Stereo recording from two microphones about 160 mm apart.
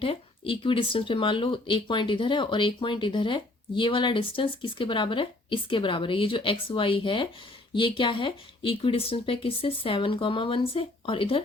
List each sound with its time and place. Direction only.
0.0 s speech: 35° left (ahead or behind)